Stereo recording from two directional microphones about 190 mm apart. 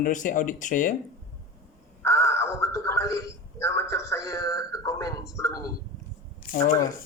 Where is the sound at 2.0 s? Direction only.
15° left (ahead or behind).